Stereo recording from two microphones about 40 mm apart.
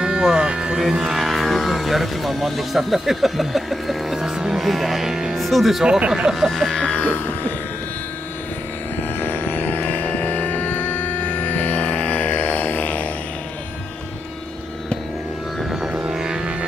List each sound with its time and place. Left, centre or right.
0.0 s music: right
0.9 s speech: centre
1.2 s speech: centre
5.3 s speech: centre
5.9 s speech: right
6.3 s a sound: centre
6.8 s a sound: left
7.1 s a sound: left
9.2 s music: left
16.1 s music: centre